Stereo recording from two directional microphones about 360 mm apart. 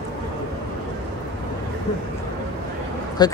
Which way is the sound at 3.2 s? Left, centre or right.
Centre.